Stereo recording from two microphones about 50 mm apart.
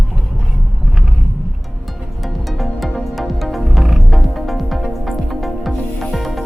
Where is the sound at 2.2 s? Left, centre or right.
Centre.